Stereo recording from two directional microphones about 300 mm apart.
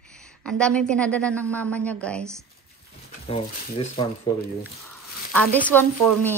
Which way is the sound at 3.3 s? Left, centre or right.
Centre.